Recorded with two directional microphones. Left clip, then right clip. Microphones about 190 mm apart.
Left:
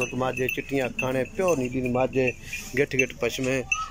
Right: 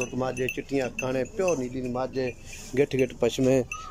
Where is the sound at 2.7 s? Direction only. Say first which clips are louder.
Even; 15° right (ahead or behind).